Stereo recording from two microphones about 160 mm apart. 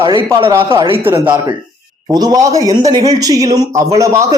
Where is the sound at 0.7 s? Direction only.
35° right (ahead or behind).